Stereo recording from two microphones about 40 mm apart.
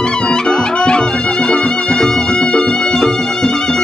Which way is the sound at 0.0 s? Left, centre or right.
Left.